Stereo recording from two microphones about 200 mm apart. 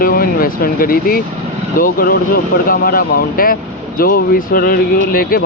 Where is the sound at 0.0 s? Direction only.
45° left (ahead or behind).